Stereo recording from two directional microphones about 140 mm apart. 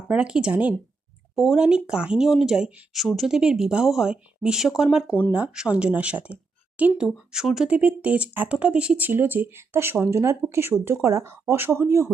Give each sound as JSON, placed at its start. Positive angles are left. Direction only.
{"t": 0.1, "sound": "speech", "side_deg": -5}